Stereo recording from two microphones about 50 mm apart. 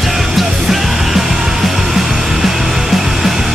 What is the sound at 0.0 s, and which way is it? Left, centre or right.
Music, centre.